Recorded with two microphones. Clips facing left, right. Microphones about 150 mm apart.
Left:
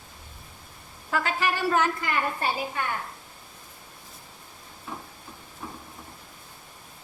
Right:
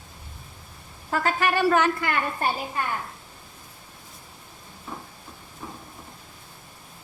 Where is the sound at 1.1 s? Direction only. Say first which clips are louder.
Right 3 dB; 45° right (ahead or behind).